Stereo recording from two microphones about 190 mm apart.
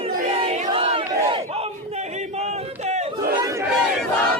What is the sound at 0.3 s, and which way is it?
Battle cry, 35° right (ahead or behind).